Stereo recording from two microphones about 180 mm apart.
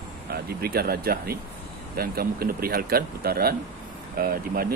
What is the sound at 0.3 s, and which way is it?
Speech, 60° right (ahead or behind).